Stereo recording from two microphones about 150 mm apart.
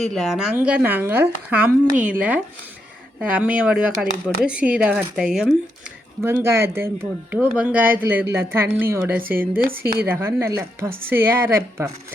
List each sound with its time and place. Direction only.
0.0 s speech: centre (ahead or behind)
6.2 s speech: 15° right (ahead or behind)